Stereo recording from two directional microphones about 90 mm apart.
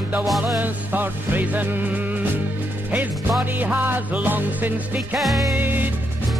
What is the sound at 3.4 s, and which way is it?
Music, 20° right (ahead or behind).